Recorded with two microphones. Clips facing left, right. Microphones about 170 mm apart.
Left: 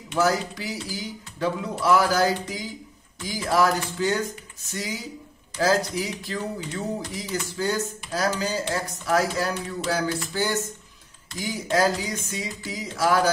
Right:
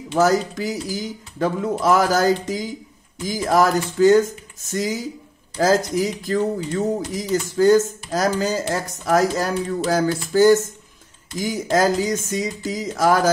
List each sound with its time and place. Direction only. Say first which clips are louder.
0.2 s speech: right 5 dB; 45° right (ahead or behind)